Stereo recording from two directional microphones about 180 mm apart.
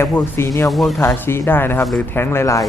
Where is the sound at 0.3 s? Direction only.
15° left (ahead or behind).